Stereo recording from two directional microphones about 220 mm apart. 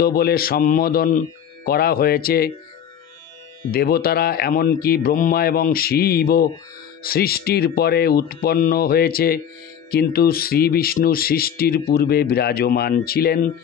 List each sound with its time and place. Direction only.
0.0 s speech: 45° left (ahead or behind)
3.7 s speech: 45° left (ahead or behind)